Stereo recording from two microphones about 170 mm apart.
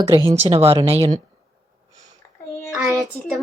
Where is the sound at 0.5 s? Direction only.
35° right (ahead or behind).